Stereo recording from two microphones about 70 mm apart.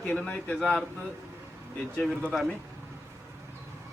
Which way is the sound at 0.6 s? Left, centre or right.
Centre.